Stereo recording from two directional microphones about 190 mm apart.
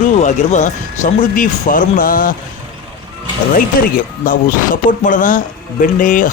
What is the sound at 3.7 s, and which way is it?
Speech, 50° left (ahead or behind).